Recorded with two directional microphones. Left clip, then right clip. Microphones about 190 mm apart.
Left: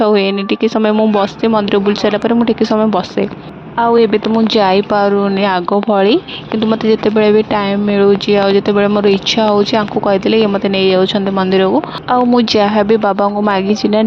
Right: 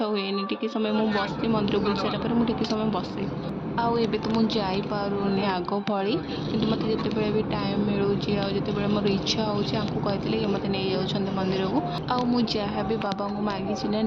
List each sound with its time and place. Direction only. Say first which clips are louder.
0.0 s speech: left 15 dB; 45° left (ahead or behind)
12.4 s speech: left 16 dB; 50° left (ahead or behind)